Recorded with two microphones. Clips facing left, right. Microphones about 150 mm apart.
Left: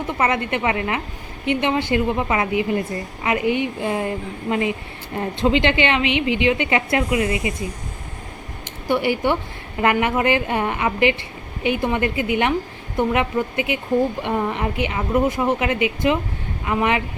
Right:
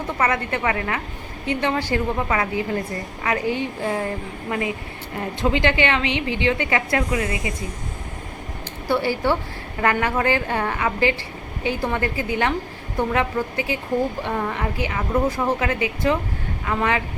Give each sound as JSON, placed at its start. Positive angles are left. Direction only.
{"t": 0.2, "sound": "a woman's voice", "side_deg": 20}
{"t": 8.9, "sound": "a woman's voice", "side_deg": 15}